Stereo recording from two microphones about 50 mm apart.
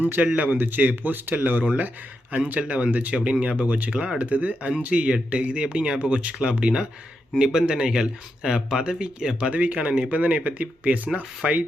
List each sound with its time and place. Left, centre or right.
0.0 s speech: right